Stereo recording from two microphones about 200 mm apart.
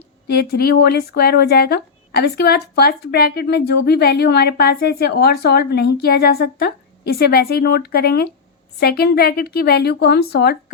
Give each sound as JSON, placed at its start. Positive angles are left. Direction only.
{"t": 0.3, "sound": "speech", "side_deg": 55}